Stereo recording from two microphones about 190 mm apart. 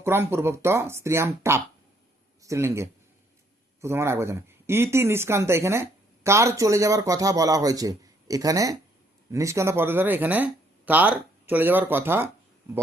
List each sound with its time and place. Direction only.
0.0 s a man's voice: 10° right (ahead or behind)